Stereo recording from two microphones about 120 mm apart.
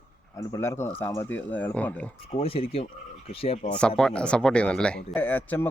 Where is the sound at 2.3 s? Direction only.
50° left (ahead or behind).